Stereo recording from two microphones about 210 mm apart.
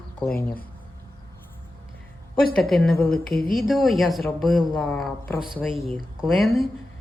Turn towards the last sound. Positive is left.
turn(degrees=0)  # may be behind; listen again after turning